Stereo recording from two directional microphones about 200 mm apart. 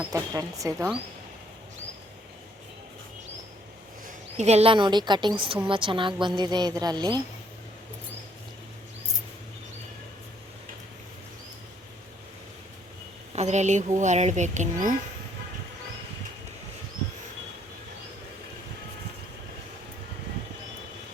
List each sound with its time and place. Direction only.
0.1 s speech: 15° right (ahead or behind)
4.0 s a woman's voice: 35° right (ahead or behind)
13.3 s a woman's voice: 35° right (ahead or behind)